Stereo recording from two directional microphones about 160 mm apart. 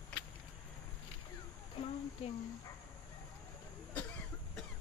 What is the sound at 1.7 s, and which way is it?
Speech, 40° left (ahead or behind).